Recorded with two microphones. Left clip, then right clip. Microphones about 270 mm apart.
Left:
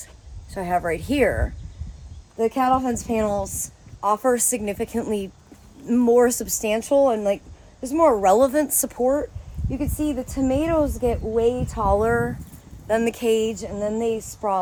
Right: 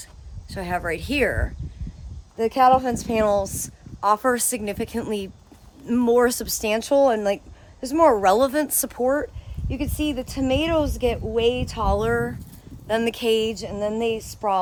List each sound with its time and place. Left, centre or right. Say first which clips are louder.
0.5 s speech: left 3 dB; centre